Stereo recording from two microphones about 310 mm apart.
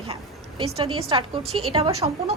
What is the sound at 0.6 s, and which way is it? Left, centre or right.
Speech, centre.